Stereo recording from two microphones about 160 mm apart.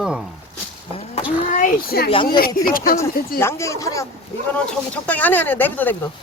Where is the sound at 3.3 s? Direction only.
20° left (ahead or behind).